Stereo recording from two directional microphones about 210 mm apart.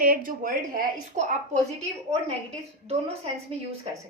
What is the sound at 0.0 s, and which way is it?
A woman's voice, 45° right (ahead or behind).